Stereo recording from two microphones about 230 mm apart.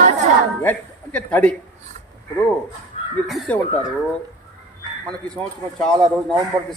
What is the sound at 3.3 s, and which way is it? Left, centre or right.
Speech, centre.